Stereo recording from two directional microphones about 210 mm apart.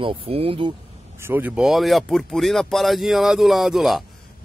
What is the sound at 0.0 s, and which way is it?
Speech, 25° right (ahead or behind).